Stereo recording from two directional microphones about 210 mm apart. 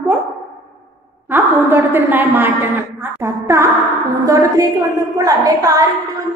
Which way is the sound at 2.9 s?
10° right (ahead or behind).